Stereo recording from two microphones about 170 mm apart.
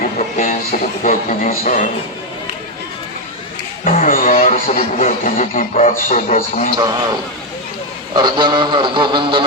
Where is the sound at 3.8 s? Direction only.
55° left (ahead or behind).